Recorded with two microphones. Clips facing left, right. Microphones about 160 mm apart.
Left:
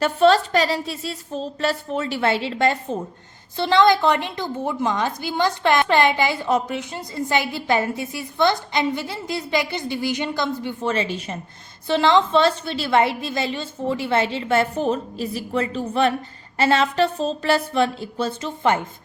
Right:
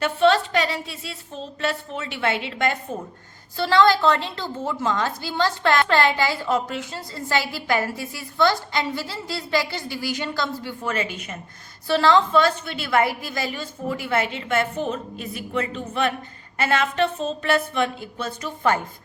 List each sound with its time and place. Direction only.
0.0 s a woman's voice: 40° left (ahead or behind)
3.6 s a woman's voice: 20° left (ahead or behind)